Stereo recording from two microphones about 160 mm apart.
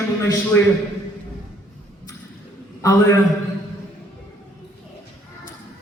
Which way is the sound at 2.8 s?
20° left (ahead or behind).